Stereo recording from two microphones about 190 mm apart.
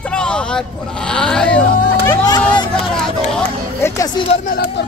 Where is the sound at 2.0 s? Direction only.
15° left (ahead or behind).